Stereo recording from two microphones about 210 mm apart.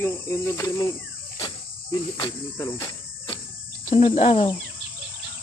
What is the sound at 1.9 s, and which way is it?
Cricket, 20° left (ahead or behind).